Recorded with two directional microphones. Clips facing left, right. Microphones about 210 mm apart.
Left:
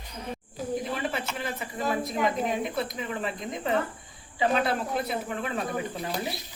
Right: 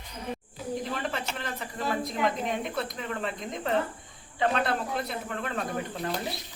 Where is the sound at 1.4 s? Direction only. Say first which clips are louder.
Left 3 dB; 5° left (ahead or behind).